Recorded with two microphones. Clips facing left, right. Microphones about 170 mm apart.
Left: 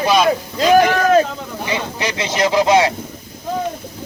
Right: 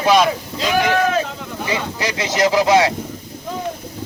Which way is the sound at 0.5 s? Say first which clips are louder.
Left 5 dB; 45° left (ahead or behind).